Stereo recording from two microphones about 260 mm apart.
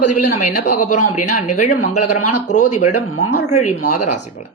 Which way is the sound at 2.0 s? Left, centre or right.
Left.